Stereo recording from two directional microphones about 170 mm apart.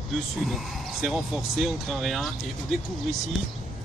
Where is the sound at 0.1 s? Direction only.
Centre (ahead or behind).